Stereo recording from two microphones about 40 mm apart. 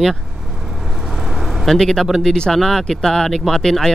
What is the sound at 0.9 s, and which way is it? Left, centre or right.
Vehicle, centre.